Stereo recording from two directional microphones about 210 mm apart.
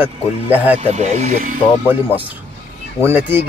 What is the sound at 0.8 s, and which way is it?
Speech, 35° right (ahead or behind).